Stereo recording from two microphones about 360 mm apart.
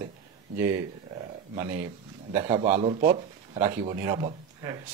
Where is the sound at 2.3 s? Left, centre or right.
Centre.